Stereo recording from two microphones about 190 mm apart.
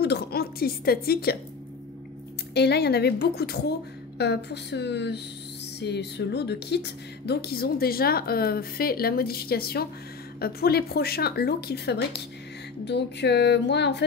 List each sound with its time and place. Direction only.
0.0 s speech: 55° left (ahead or behind)
2.5 s speech: 60° left (ahead or behind)